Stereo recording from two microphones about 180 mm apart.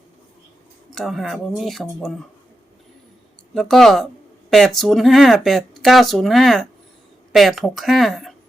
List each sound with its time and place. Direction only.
0.9 s speech: centre (ahead or behind)
3.5 s speech: centre (ahead or behind)